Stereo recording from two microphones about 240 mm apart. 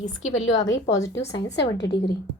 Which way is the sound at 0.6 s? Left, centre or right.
Centre.